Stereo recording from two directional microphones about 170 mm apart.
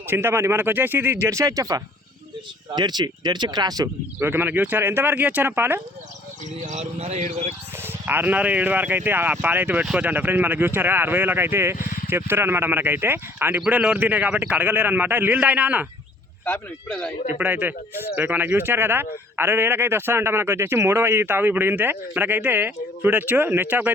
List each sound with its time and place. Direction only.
0.1 s speech: 15° right (ahead or behind)
6.6 s speech: 40° right (ahead or behind)
7.8 s speech: 10° right (ahead or behind)
16.9 s speech: 5° left (ahead or behind)
17.2 s speech: 10° right (ahead or behind)